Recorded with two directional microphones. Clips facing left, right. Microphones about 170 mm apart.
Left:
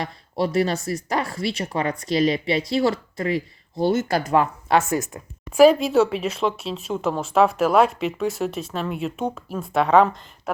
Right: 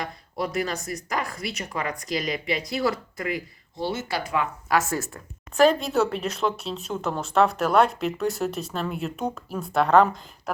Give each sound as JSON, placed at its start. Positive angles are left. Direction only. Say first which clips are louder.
{"t": 0.0, "sound": "speech", "louder": "left 5 dB", "side_deg": 30}
{"t": 3.8, "sound": "speech", "louder": "left 8 dB", "side_deg": 45}
{"t": 4.9, "sound": "speech", "louder": "left 5 dB", "side_deg": 15}